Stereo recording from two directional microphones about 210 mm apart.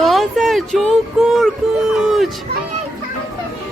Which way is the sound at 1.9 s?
Centre (ahead or behind).